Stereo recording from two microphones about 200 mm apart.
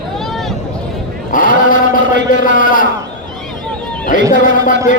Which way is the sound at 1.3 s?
45° left (ahead or behind).